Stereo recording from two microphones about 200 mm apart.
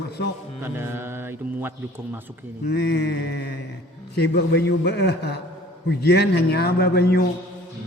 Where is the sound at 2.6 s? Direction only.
50° left (ahead or behind).